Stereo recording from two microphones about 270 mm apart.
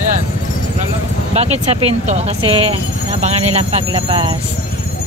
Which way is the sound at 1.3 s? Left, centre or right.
Right.